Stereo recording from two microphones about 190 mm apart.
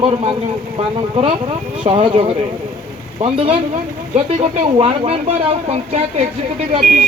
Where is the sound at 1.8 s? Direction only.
30° right (ahead or behind).